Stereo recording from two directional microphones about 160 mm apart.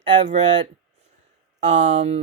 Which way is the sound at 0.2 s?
50° right (ahead or behind).